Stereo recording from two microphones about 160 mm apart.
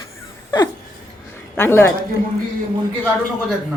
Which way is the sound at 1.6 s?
15° left (ahead or behind).